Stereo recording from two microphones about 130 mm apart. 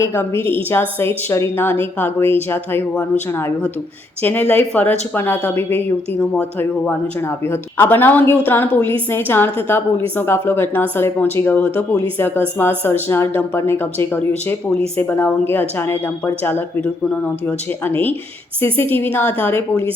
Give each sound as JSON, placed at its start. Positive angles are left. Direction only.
{"t": 0.0, "sound": "speech", "side_deg": 20}